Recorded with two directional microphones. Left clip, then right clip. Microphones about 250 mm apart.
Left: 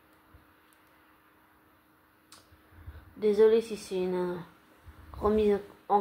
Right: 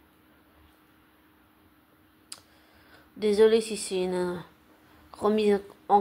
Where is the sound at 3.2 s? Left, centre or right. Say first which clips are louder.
Right 2 dB; right.